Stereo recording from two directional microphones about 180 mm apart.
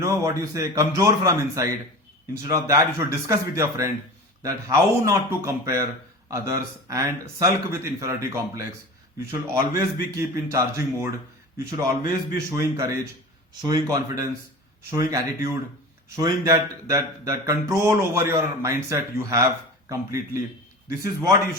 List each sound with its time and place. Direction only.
0.0 s speech: 15° right (ahead or behind)